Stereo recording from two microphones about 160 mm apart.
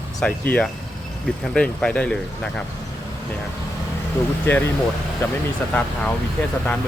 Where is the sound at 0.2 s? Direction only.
5° left (ahead or behind).